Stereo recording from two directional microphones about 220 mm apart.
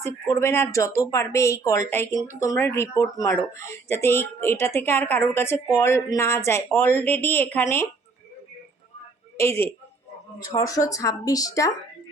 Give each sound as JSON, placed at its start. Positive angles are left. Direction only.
{"t": 0.0, "sound": "speech", "side_deg": 10}
{"t": 9.4, "sound": "speech", "side_deg": 10}